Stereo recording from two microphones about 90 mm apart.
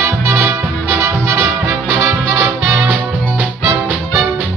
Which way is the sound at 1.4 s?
20° right (ahead or behind).